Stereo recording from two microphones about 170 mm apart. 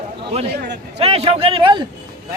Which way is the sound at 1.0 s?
35° right (ahead or behind).